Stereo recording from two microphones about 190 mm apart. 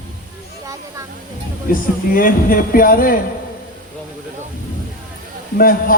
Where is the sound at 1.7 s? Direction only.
45° left (ahead or behind).